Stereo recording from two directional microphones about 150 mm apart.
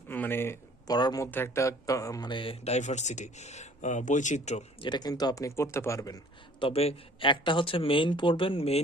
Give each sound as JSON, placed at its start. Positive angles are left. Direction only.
{"t": 0.1, "sound": "a sound", "side_deg": 15}
{"t": 0.9, "sound": "speech", "side_deg": 25}
{"t": 1.3, "sound": "speech", "side_deg": 15}
{"t": 4.8, "sound": "speech", "side_deg": 30}
{"t": 6.6, "sound": "speech", "side_deg": 40}